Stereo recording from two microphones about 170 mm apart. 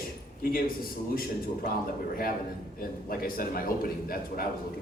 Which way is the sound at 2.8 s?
60° left (ahead or behind).